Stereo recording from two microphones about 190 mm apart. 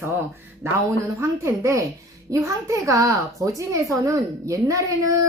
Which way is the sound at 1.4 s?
15° right (ahead or behind).